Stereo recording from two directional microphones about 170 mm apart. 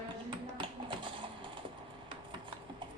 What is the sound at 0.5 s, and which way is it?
Music, 30° right (ahead or behind).